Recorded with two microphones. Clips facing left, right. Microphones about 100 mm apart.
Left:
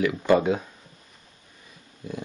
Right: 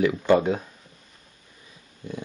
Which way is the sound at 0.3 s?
Centre (ahead or behind).